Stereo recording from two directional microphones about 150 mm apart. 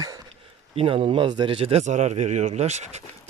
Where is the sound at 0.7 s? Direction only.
40° right (ahead or behind).